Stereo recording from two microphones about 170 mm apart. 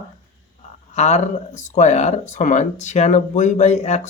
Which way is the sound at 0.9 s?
40° left (ahead or behind).